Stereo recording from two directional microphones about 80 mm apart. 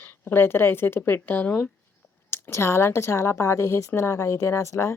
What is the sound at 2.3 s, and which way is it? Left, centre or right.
A woman's voice, left.